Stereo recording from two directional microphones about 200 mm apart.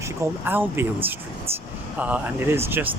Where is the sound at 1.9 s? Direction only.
10° right (ahead or behind).